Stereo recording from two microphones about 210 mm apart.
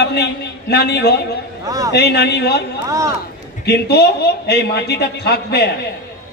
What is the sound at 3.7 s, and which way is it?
A man's voice, 50° left (ahead or behind).